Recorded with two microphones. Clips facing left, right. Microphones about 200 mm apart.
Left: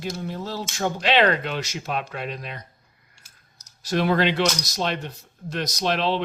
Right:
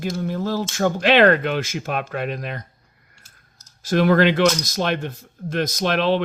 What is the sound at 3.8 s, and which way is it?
Speech, 50° right (ahead or behind).